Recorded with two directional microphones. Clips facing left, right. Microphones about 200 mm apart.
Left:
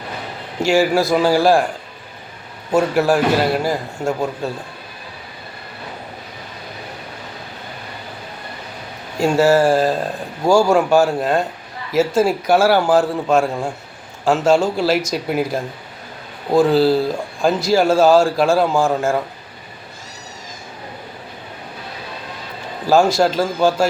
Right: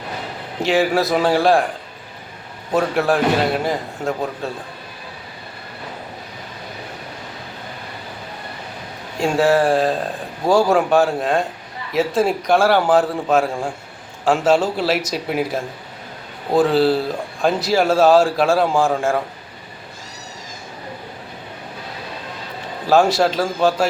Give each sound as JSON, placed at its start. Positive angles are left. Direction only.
{"t": 0.6, "sound": "speech", "side_deg": 0}
{"t": 2.7, "sound": "speech", "side_deg": 0}
{"t": 9.1, "sound": "speech", "side_deg": 0}
{"t": 22.9, "sound": "speech", "side_deg": 0}